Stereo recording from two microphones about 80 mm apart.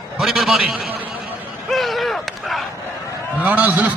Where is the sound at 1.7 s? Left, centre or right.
Centre.